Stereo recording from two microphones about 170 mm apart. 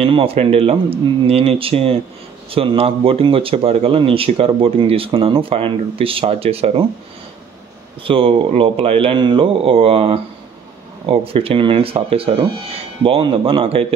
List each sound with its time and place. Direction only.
0.0 s speech: 35° right (ahead or behind)
8.0 s speech: 30° right (ahead or behind)